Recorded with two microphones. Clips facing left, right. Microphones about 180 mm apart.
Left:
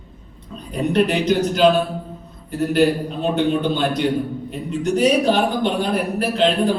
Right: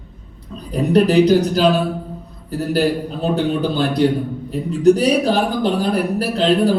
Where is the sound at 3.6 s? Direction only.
35° right (ahead or behind).